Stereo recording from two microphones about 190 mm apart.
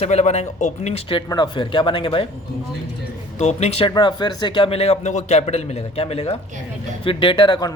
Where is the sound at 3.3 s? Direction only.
35° left (ahead or behind).